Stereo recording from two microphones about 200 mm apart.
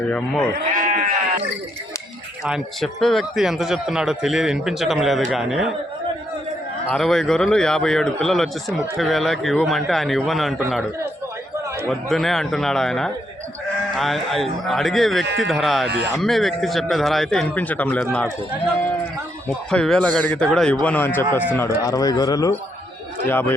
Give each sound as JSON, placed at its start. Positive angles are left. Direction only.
{"t": 0.1, "sound": "speech", "side_deg": 5}
{"t": 0.8, "sound": "sheep", "side_deg": -40}
{"t": 2.4, "sound": "a man's voice", "side_deg": 0}
{"t": 6.9, "sound": "a man's voice", "side_deg": 0}
{"t": 11.9, "sound": "a man's voice", "side_deg": 0}
{"t": 19.7, "sound": "a man's voice", "side_deg": 5}